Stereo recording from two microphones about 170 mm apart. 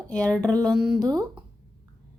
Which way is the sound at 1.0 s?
25° right (ahead or behind).